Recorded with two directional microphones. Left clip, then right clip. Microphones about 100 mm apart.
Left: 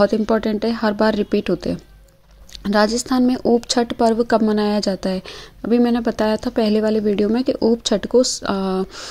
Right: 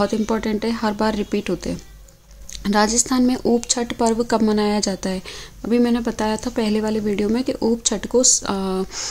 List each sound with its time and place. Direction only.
0.0 s a woman's voice: 40° left (ahead or behind)
2.6 s a woman's voice: 30° left (ahead or behind)